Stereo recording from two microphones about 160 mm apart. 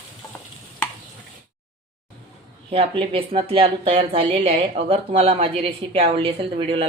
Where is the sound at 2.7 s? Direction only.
35° right (ahead or behind).